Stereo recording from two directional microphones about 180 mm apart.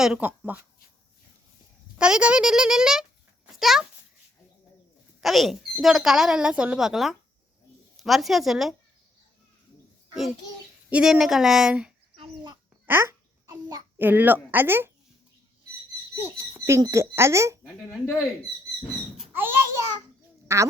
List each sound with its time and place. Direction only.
0.0 s a woman's voice: 5° right (ahead or behind)
2.0 s a child's voice: 5° right (ahead or behind)
5.2 s speech: centre (ahead or behind)
10.8 s speech: 5° right (ahead or behind)
12.1 s a sound: 25° right (ahead or behind)
12.8 s babbling: 10° right (ahead or behind)
14.1 s a woman's voice: 10° right (ahead or behind)
16.2 s speech: 15° right (ahead or behind)
17.8 s speech: 15° left (ahead or behind)
18.8 s wild animals: centre (ahead or behind)
19.3 s a sound: 10° right (ahead or behind)
20.5 s a woman's voice: 15° right (ahead or behind)